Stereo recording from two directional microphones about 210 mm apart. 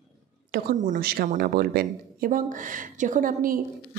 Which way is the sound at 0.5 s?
40° right (ahead or behind).